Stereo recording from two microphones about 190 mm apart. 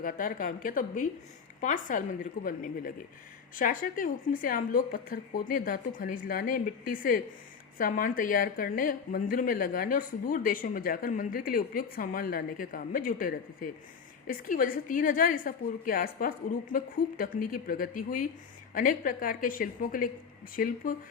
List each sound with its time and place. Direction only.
0.0 s a woman's voice: 45° left (ahead or behind)